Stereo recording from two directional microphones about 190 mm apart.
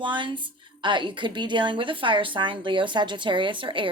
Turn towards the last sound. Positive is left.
turn(degrees=-25)  # may be behind; listen again after turning